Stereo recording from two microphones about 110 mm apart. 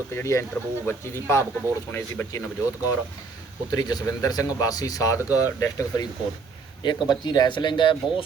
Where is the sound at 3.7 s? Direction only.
35° left (ahead or behind).